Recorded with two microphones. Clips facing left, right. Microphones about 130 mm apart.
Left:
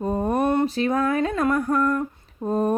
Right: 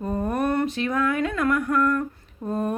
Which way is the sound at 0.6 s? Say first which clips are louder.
Left 2 dB; 35° left (ahead or behind).